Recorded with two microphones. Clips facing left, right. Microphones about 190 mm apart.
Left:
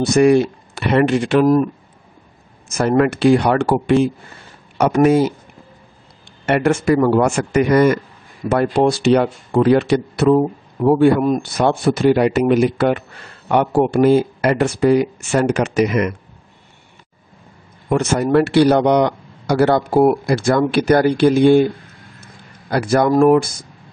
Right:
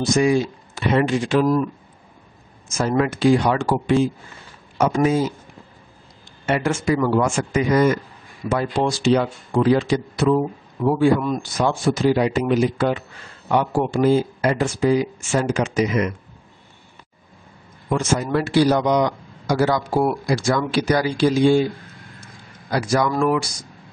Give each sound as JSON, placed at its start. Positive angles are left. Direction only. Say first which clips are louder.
{"t": 0.0, "sound": "speech", "louder": "left 6 dB", "side_deg": 65}
{"t": 2.8, "sound": "speech", "louder": "left 4 dB", "side_deg": 60}
{"t": 6.4, "sound": "speech", "louder": "left 5 dB", "side_deg": 60}
{"t": 17.8, "sound": "speech", "louder": "left 5 dB", "side_deg": 65}
{"t": 22.7, "sound": "speech", "louder": "left 5 dB", "side_deg": 55}